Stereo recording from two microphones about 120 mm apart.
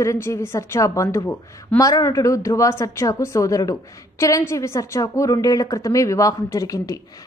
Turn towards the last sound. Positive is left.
turn(degrees=30)  # may be behind; listen again after turning